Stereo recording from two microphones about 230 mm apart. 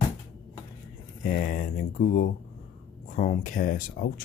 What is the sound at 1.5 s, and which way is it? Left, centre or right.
Speech, left.